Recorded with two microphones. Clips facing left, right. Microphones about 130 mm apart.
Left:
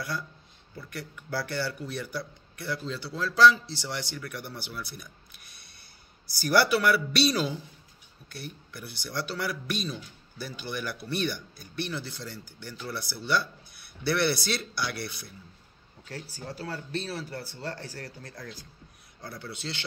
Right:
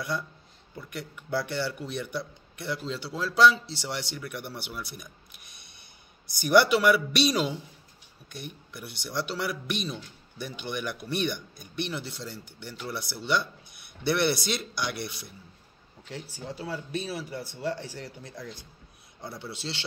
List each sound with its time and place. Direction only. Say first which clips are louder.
0.7 s a man's voice: right 1 dB; 20° right (ahead or behind)